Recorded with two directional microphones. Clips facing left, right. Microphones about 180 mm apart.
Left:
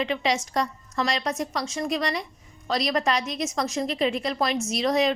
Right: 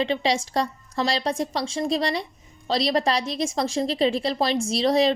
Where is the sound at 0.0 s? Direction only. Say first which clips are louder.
Right 2 dB; 30° right (ahead or behind).